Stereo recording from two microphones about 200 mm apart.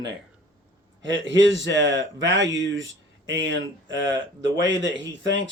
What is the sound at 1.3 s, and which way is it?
A man's voice, 70° right (ahead or behind).